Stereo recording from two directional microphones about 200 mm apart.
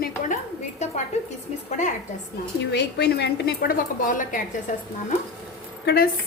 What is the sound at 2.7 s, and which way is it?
A woman's voice, 55° left (ahead or behind).